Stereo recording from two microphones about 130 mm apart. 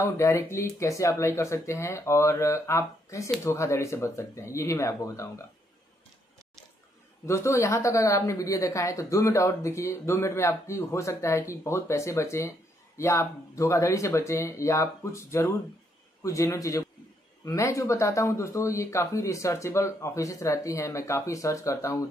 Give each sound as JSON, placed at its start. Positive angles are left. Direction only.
{"t": 0.0, "sound": "speech", "side_deg": 20}
{"t": 7.2, "sound": "speech", "side_deg": 20}